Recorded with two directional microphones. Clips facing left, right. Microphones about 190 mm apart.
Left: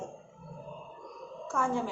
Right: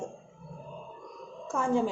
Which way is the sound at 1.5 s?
20° right (ahead or behind).